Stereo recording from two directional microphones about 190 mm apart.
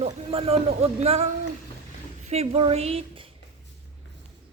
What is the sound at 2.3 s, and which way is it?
A woman's voice, 35° right (ahead or behind).